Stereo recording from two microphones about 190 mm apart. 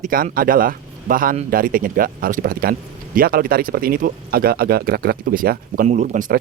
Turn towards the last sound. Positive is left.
turn(degrees=-45)  # may be behind; listen again after turning